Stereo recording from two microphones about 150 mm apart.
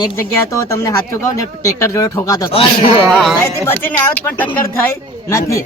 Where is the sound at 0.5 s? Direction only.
20° left (ahead or behind).